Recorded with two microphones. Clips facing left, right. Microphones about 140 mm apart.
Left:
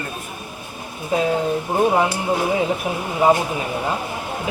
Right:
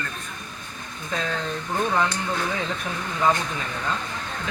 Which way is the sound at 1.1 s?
15° left (ahead or behind).